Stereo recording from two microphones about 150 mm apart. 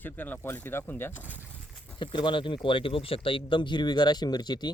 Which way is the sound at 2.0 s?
30° left (ahead or behind).